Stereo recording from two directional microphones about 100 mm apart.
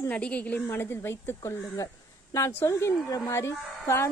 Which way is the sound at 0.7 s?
25° left (ahead or behind).